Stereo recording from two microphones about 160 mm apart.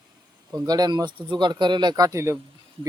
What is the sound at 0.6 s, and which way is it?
Speech, 25° right (ahead or behind).